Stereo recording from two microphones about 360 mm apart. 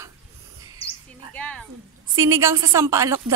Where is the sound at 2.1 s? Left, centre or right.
Centre.